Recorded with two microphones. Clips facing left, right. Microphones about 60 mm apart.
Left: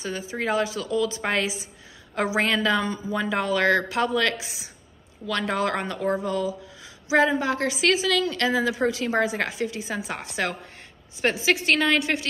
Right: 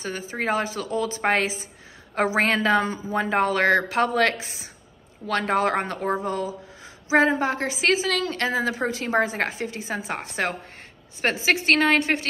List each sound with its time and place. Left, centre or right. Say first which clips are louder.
0.0 s a woman's voice: right 1 dB; right